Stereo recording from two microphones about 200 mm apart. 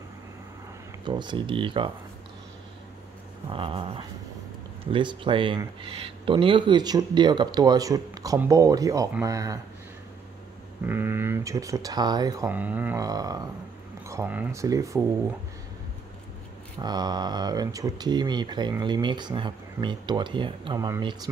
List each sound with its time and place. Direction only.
1.0 s speech: 20° right (ahead or behind)
3.4 s speech: 25° right (ahead or behind)
10.9 s speech: 10° right (ahead or behind)
16.8 s speech: 20° right (ahead or behind)